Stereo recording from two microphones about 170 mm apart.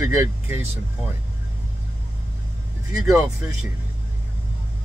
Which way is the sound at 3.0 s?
15° right (ahead or behind).